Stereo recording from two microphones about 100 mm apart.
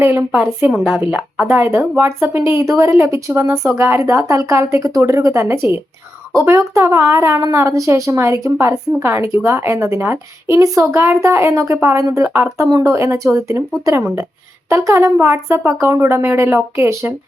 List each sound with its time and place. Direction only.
0.0 s a woman's voice: 20° right (ahead or behind)